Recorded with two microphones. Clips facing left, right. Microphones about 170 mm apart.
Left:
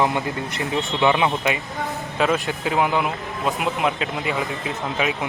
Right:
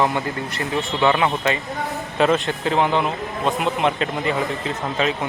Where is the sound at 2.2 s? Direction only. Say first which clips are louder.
Right 3 dB; centre (ahead or behind).